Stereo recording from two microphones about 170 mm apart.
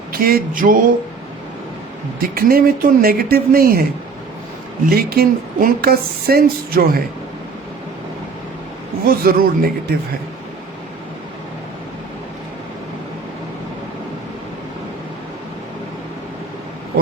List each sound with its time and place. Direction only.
0.1 s speech: 60° right (ahead or behind)
2.1 s speech: 60° right (ahead or behind)
4.9 s speech: 60° right (ahead or behind)
9.0 s speech: 60° right (ahead or behind)